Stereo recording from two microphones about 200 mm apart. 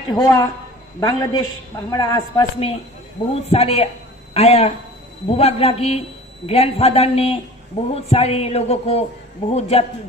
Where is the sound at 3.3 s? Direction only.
30° left (ahead or behind).